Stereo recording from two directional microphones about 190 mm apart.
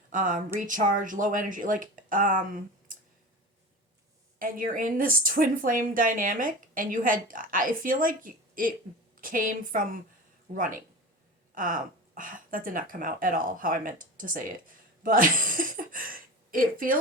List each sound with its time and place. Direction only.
0.1 s speech: 45° right (ahead or behind)
4.4 s speech: 45° right (ahead or behind)
15.0 s a sound: 45° right (ahead or behind)